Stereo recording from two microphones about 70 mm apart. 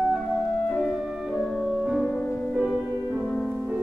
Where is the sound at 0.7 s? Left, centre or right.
Centre.